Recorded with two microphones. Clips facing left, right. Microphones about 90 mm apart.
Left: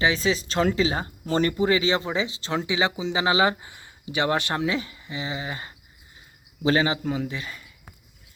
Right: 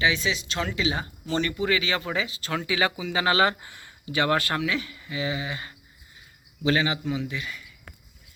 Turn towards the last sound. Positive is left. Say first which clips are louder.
# even
turn(degrees=35)  # may be behind; listen again after turning